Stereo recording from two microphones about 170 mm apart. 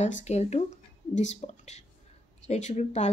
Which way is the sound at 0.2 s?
40° left (ahead or behind).